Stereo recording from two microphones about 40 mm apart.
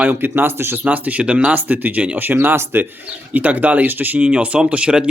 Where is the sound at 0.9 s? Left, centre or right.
Right.